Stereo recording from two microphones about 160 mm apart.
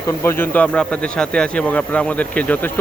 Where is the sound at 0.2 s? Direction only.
15° left (ahead or behind).